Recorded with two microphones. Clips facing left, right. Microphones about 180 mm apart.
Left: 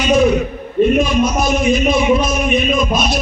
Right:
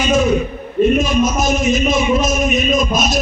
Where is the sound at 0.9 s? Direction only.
45° right (ahead or behind).